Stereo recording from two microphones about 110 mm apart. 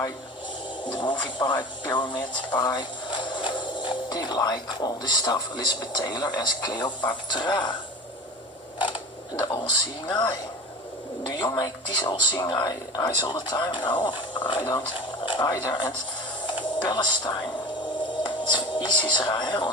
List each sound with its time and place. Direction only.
0.9 s speech: 45° left (ahead or behind)
10.1 s speech: 40° left (ahead or behind)
16.5 s music: 45° left (ahead or behind)
18.2 s speech: 45° left (ahead or behind)